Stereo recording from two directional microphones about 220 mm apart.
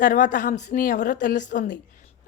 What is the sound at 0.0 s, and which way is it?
A woman's voice, 35° left (ahead or behind).